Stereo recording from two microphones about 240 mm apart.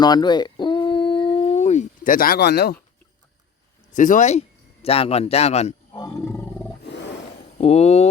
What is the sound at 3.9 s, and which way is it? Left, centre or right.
Speech, left.